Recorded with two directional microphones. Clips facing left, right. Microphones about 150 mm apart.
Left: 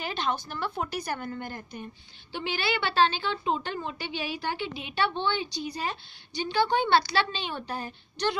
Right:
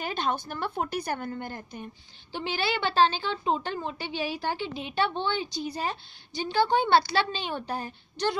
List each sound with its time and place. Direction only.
0.0 s a woman's voice: 50° right (ahead or behind)
2.3 s a woman's voice: 40° right (ahead or behind)